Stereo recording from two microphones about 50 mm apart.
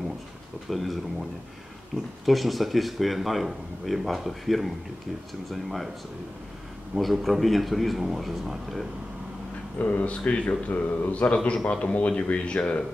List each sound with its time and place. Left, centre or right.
0.7 s speech: centre
2.2 s speech: centre
7.0 s speech: centre
9.8 s speech: left
11.3 s a man's voice: centre